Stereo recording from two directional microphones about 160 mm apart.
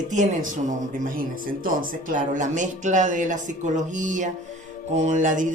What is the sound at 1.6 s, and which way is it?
Speech, 55° right (ahead or behind).